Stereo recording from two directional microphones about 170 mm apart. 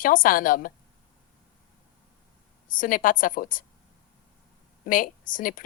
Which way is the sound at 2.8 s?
55° left (ahead or behind).